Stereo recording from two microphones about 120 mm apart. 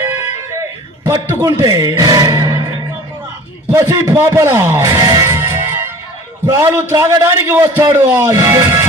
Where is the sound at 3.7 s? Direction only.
20° right (ahead or behind).